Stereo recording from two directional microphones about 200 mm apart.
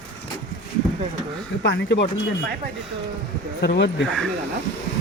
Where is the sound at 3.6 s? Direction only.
55° left (ahead or behind).